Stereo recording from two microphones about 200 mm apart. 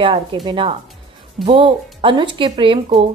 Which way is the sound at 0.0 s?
25° right (ahead or behind).